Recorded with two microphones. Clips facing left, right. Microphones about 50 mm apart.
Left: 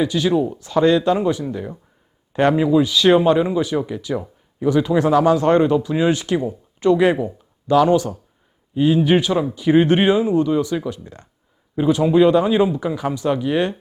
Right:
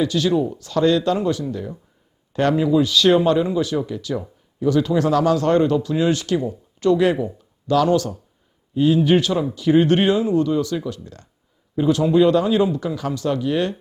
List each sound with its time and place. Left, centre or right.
0.0 s speech: centre